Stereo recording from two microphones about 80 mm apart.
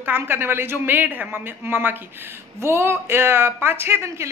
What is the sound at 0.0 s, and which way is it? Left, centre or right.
Speech, right.